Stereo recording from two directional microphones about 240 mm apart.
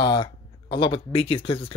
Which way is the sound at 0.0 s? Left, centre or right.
Centre.